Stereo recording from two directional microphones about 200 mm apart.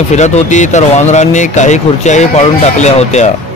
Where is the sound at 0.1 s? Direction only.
35° left (ahead or behind).